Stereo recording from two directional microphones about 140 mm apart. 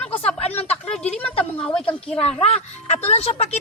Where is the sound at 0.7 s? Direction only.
10° left (ahead or behind).